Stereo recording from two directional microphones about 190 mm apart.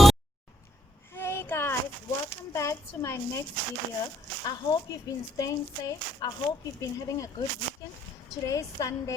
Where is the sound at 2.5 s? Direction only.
15° left (ahead or behind).